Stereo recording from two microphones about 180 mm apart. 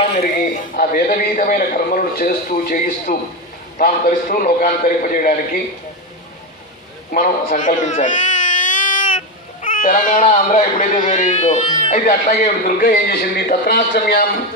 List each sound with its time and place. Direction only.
0.7 s a man's voice: 50° left (ahead or behind)
7.1 s baby cry: 50° left (ahead or behind)
9.8 s a man's voice: 50° left (ahead or behind)
12.3 s a man's voice: 50° left (ahead or behind)